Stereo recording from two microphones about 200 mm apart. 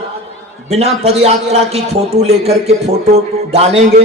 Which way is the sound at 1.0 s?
30° right (ahead or behind).